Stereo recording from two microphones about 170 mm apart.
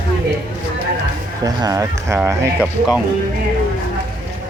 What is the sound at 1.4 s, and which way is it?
Speech, 20° right (ahead or behind).